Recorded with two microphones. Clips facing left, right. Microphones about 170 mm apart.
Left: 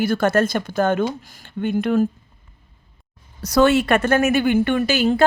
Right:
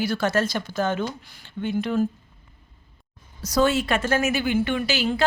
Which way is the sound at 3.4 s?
65° left (ahead or behind).